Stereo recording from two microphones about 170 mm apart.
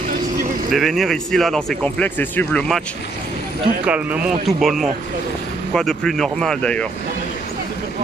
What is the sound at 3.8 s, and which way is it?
Speech, 5° right (ahead or behind).